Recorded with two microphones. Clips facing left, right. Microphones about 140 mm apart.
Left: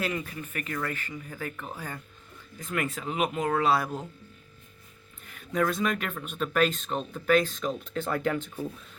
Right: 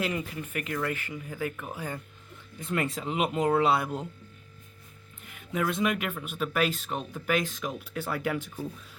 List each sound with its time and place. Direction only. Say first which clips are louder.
0.0 s speech: right 1 dB; 15° right (ahead or behind)
2.6 s speech: right 1 dB; 30° right (ahead or behind)
5.3 s speech: left 2 dB; 15° right (ahead or behind)